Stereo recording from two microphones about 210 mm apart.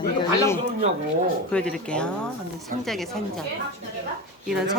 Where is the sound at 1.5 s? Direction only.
5° left (ahead or behind).